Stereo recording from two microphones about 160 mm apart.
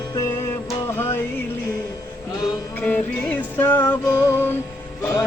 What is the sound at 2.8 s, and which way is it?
Music, 10° left (ahead or behind).